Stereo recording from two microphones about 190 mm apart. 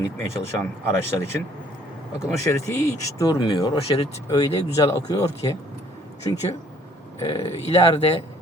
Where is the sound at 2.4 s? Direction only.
15° left (ahead or behind).